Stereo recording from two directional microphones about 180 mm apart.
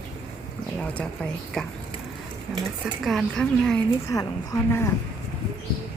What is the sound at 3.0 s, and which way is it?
Speech, centre (ahead or behind).